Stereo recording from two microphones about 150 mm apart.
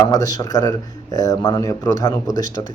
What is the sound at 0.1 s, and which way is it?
Speech, 25° left (ahead or behind).